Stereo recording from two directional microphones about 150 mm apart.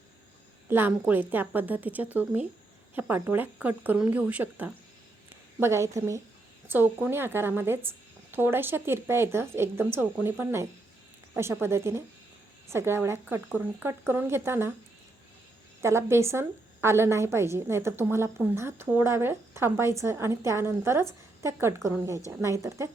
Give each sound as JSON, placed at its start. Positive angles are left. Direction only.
{"t": 0.7, "sound": "a woman's voice", "side_deg": -15}
{"t": 15.8, "sound": "a woman's voice", "side_deg": -20}